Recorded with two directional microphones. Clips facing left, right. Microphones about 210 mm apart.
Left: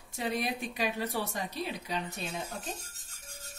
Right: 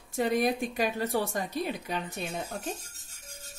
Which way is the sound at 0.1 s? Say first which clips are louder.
Right 7 dB; 50° right (ahead or behind).